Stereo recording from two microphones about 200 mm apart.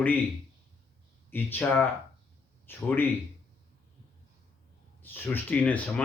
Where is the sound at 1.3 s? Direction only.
10° left (ahead or behind).